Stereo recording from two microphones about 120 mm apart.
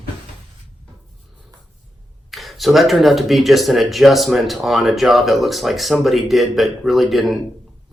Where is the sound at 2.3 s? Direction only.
Centre (ahead or behind).